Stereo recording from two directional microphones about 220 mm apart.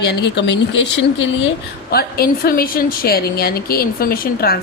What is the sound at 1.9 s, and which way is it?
A woman's voice, 45° left (ahead or behind).